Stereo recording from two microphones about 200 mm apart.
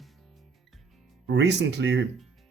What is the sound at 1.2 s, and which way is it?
Speech, 60° right (ahead or behind).